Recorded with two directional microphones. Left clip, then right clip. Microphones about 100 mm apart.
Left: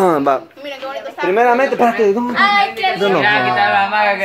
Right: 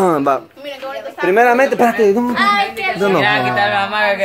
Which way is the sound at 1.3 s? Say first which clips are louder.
Right 1 dB; 55° right (ahead or behind).